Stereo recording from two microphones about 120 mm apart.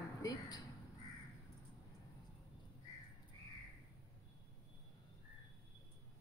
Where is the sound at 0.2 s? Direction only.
30° left (ahead or behind).